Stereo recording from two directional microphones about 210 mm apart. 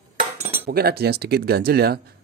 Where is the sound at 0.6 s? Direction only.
50° right (ahead or behind).